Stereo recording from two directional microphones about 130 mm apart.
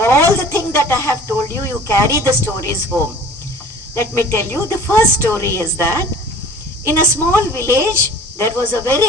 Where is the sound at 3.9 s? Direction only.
20° left (ahead or behind).